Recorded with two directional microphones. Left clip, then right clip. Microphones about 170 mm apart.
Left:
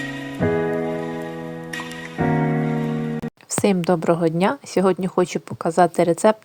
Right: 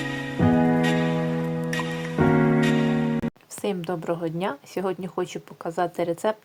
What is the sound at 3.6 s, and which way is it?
A woman's voice, 35° left (ahead or behind).